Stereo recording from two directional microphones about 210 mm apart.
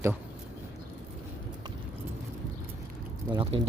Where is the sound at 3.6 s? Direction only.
25° right (ahead or behind).